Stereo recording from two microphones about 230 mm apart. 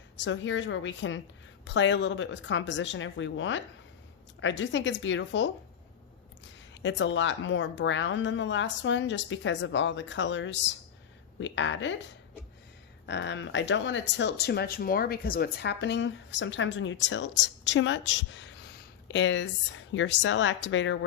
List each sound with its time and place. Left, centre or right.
0.2 s speech: left
6.8 s speech: left
13.1 s speech: left